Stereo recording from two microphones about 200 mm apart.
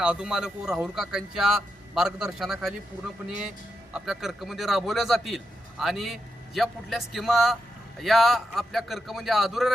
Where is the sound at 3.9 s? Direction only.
Centre (ahead or behind).